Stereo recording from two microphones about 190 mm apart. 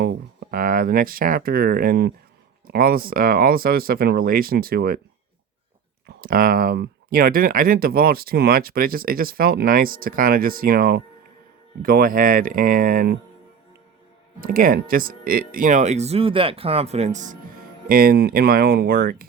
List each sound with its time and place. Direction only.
0.0 s speech: 50° right (ahead or behind)
6.1 s speech: 50° right (ahead or behind)
14.4 s speech: 50° right (ahead or behind)
17.8 s speech: 50° right (ahead or behind)